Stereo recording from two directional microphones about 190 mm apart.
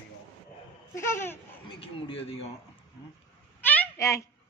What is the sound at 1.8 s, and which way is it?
Speech, 30° left (ahead or behind).